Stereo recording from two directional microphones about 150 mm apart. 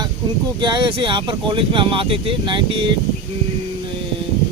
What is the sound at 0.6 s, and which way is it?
Speech, 30° right (ahead or behind).